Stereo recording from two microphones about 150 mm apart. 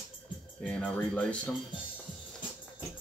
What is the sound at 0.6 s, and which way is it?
Speech, 10° left (ahead or behind).